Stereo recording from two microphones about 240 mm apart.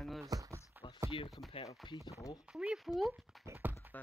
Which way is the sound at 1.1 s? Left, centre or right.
Left.